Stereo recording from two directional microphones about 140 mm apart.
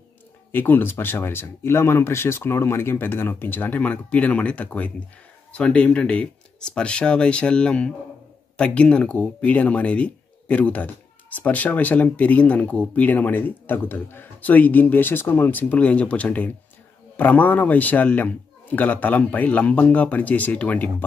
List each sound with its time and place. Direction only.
0.5 s speech: 15° left (ahead or behind)